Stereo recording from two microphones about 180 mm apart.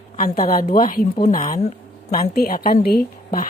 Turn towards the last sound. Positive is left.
turn(degrees=60)  # may be behind; listen again after turning